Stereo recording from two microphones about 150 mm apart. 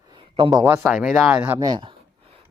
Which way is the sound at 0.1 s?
35° right (ahead or behind).